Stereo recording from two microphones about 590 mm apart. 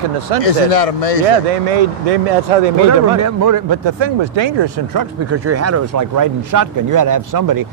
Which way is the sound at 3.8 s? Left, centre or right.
Right.